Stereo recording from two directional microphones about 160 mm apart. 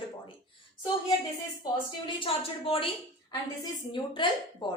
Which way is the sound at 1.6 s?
30° left (ahead or behind).